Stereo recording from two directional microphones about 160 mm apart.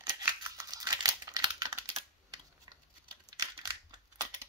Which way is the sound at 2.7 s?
25° right (ahead or behind).